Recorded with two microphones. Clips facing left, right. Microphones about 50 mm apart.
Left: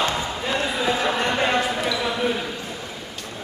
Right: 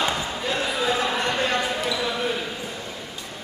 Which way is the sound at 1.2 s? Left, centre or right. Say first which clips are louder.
Left 2 dB; left.